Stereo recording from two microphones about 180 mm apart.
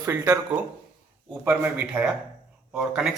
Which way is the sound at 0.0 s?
15° right (ahead or behind).